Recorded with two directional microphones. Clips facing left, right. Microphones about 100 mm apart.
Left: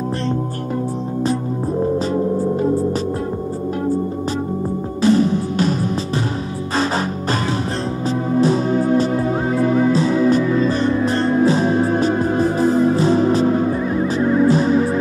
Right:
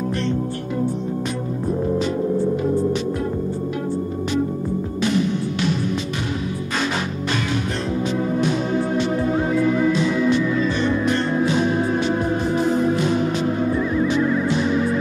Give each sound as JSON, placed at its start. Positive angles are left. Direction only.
{"t": 5.0, "sound": "music", "side_deg": 35}
{"t": 8.4, "sound": "music", "side_deg": 35}